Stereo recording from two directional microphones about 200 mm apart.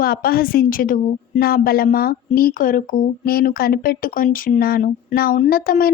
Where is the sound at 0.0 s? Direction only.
45° left (ahead or behind).